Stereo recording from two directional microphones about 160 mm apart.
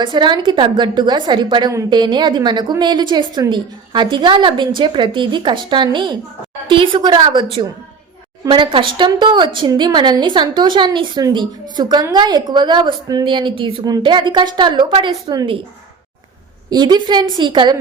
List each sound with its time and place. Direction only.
0.0 s a woman's voice: 30° right (ahead or behind)
8.4 s a woman's voice: 30° right (ahead or behind)
16.6 s a woman's voice: 25° right (ahead or behind)